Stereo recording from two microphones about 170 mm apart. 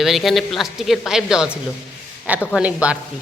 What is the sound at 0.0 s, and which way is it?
Speech, centre (ahead or behind).